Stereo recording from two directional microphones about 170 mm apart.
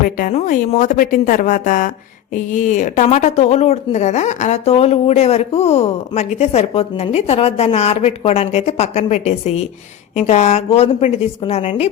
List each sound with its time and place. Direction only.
0.0 s speech: 50° left (ahead or behind)